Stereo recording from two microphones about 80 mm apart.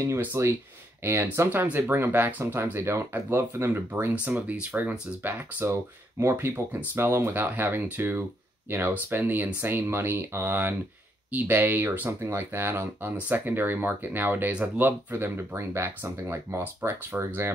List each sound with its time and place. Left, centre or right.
0.3 s speech: right; by 4.9 s centre
5.2 s speech: right